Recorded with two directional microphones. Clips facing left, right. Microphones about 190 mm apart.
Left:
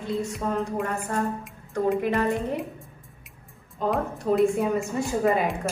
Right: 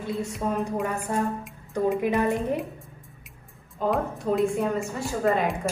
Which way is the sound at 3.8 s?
Centre (ahead or behind).